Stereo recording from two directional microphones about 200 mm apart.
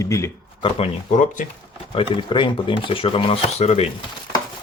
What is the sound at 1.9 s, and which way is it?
Speech, 25° left (ahead or behind).